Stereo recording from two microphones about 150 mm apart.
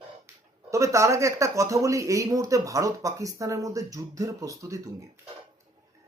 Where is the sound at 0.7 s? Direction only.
20° right (ahead or behind).